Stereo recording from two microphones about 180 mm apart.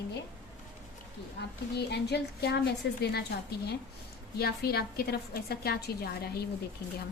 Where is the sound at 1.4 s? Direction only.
65° left (ahead or behind).